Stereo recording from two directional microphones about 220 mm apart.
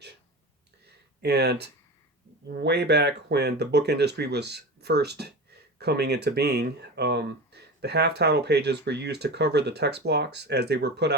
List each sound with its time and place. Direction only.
1.2 s speech: 50° right (ahead or behind)